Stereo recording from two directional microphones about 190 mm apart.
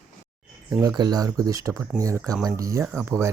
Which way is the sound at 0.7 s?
20° right (ahead or behind).